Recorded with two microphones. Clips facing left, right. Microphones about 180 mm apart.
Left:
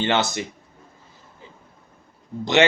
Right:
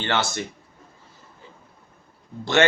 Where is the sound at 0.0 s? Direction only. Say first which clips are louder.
Left 3 dB; 20° left (ahead or behind).